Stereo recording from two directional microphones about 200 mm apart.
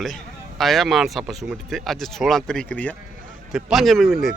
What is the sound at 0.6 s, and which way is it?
Speech, centre (ahead or behind).